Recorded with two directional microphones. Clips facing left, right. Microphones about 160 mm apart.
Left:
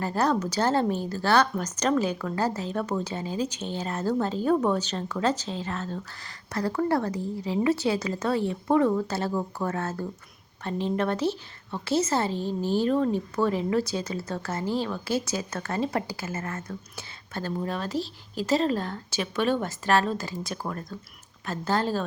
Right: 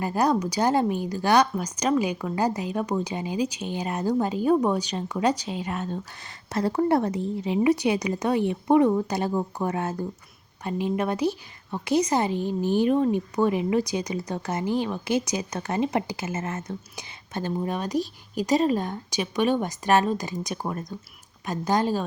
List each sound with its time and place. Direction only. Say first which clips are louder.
0.0 s a woman's voice: right 2 dB; 10° right (ahead or behind)